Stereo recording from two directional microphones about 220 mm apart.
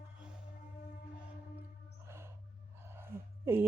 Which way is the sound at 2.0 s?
10° right (ahead or behind).